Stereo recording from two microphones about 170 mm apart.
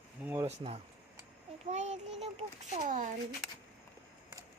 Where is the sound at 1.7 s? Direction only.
45° right (ahead or behind).